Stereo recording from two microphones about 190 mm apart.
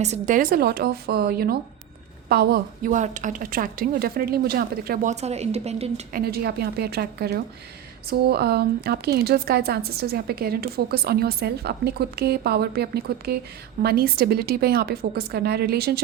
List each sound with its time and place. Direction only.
0.0 s a woman's voice: 40° right (ahead or behind)
5.1 s a woman's voice: 35° right (ahead or behind)
6.1 s speech: 50° right (ahead or behind)